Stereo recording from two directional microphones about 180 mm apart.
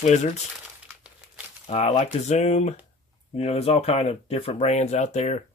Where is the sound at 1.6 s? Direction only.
35° left (ahead or behind).